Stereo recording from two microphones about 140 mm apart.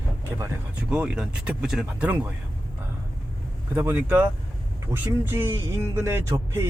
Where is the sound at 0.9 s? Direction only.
5° right (ahead or behind).